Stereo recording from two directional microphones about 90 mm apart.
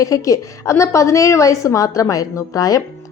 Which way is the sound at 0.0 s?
40° left (ahead or behind).